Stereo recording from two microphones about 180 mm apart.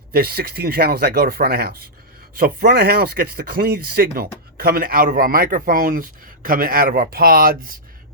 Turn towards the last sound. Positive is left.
turn(degrees=-55)  # may be behind; listen again after turning